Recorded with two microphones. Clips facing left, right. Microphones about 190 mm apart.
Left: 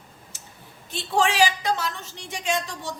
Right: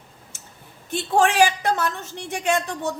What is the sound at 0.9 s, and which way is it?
A woman's voice, 55° right (ahead or behind).